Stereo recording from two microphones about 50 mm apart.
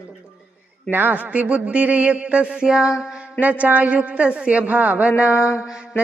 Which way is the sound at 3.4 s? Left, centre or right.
Right.